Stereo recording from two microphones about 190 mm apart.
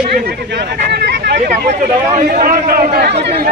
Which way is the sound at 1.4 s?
40° right (ahead or behind).